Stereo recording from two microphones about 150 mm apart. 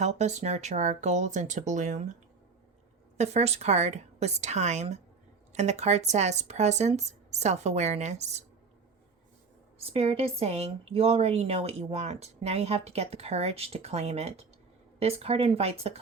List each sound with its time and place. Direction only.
0.0 s a woman's voice: 50° right (ahead or behind)
3.2 s a woman's voice: 45° right (ahead or behind)
9.7 s a woman's voice: 40° right (ahead or behind)